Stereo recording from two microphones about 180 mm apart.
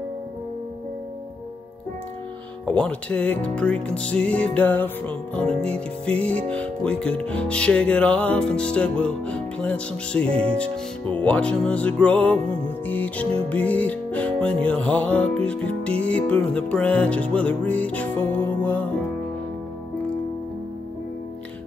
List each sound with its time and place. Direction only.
2.8 s speech: 5° left (ahead or behind)
13.5 s music: 10° left (ahead or behind)